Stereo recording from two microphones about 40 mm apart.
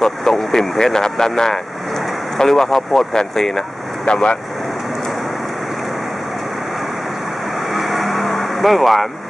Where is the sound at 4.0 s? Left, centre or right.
Left.